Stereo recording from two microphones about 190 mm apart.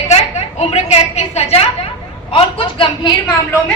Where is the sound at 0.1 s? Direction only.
35° left (ahead or behind).